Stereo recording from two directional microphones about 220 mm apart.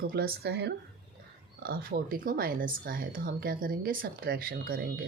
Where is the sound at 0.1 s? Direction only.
45° right (ahead or behind).